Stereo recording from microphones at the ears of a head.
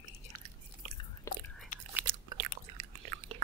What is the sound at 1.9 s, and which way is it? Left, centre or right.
Chewing, right.